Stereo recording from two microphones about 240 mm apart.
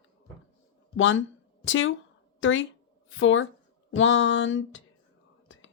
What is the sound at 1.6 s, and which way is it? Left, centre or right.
Speech, left.